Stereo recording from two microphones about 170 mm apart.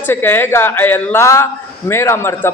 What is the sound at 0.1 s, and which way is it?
A man's voice, 15° left (ahead or behind).